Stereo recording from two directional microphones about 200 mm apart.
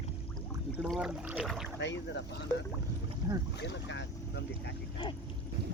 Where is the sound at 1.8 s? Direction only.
60° left (ahead or behind).